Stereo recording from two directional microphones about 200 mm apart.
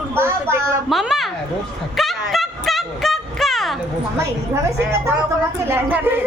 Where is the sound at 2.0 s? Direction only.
Centre (ahead or behind).